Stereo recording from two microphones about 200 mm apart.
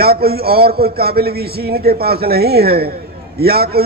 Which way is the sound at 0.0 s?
50° right (ahead or behind).